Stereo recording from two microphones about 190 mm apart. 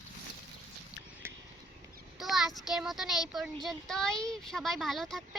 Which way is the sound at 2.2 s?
Centre (ahead or behind).